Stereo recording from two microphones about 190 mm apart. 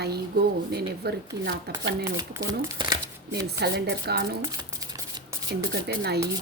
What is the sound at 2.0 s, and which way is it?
Speech, 20° right (ahead or behind).